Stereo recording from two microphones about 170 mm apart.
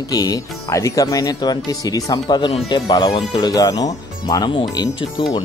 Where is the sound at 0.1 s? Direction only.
20° left (ahead or behind).